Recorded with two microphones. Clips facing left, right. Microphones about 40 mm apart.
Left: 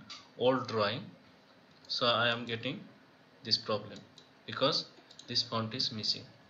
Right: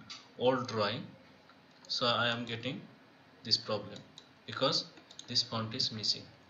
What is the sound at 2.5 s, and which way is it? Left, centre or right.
Speech, centre.